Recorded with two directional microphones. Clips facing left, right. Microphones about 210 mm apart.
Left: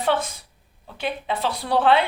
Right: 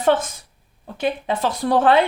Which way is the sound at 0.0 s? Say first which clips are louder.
Right 5 dB; 45° right (ahead or behind).